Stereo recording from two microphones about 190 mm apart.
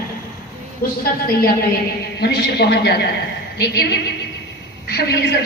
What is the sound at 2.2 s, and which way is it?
A man's voice, 60° left (ahead or behind).